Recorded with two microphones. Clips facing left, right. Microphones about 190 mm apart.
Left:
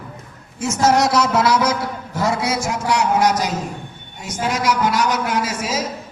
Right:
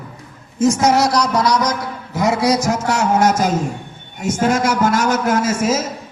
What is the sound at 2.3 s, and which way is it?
A man's voice, 35° right (ahead or behind).